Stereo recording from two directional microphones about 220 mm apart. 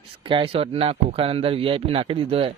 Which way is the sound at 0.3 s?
25° right (ahead or behind).